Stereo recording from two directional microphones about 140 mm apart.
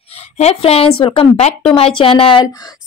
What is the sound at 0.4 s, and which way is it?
A woman's voice, 45° left (ahead or behind).